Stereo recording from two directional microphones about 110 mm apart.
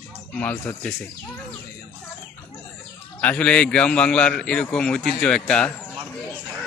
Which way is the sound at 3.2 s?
10° left (ahead or behind).